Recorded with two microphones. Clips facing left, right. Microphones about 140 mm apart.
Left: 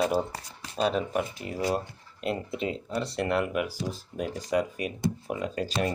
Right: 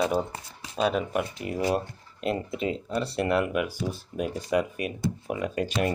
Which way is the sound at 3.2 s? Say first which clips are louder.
Right 2 dB; 25° left (ahead or behind).